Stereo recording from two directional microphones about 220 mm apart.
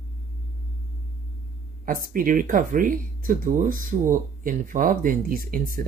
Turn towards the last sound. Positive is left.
turn(degrees=-40)  # may be behind; listen again after turning